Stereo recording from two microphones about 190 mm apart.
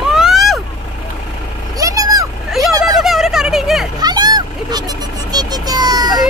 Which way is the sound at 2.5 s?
Centre (ahead or behind).